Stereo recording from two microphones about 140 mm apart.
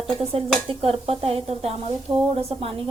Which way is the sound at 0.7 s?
45° right (ahead or behind).